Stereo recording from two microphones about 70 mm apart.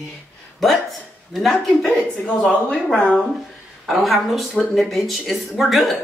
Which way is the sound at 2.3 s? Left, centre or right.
Centre.